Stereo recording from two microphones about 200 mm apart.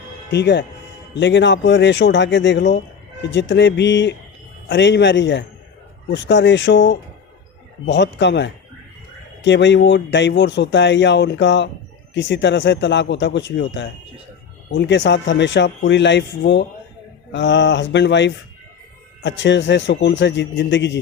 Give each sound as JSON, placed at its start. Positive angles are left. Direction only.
{"t": 0.3, "sound": "speech", "side_deg": 55}